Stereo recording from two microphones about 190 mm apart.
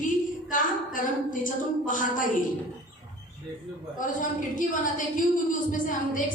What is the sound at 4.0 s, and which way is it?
A woman's voice, 45° left (ahead or behind).